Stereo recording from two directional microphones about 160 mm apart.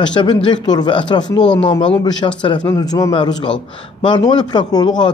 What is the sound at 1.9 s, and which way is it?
A man's voice, 25° left (ahead or behind).